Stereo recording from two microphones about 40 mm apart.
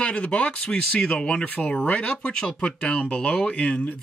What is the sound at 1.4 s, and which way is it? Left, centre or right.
Speech, left.